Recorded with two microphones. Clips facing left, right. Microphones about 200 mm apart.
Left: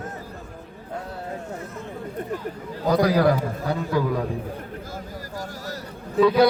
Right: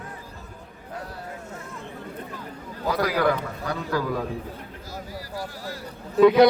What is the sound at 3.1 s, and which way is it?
Speech, 35° left (ahead or behind).